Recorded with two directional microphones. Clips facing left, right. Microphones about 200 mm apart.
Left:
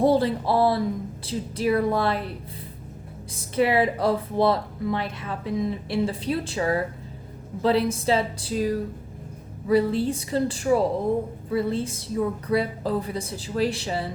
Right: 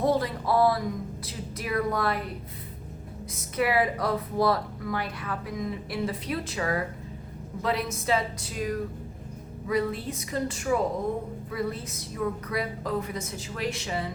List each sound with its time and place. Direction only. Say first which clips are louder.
0.0 s speech: left 5 dB; 30° left (ahead or behind)
3.3 s a woman's voice: left 4 dB; 30° left (ahead or behind)